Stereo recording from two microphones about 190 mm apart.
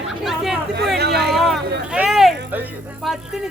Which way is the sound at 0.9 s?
60° right (ahead or behind).